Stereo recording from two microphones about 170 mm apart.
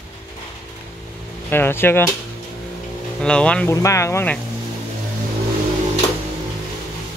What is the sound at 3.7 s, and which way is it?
Speech, 15° left (ahead or behind).